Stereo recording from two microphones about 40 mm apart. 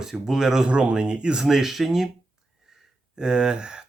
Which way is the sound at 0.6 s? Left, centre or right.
Right.